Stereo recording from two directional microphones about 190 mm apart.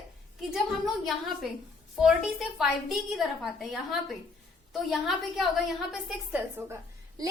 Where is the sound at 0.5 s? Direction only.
Centre (ahead or behind).